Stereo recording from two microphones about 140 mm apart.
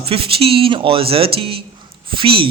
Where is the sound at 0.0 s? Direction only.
40° right (ahead or behind).